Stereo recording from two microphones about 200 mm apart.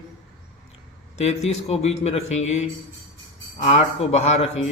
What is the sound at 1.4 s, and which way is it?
Speech, 30° left (ahead or behind).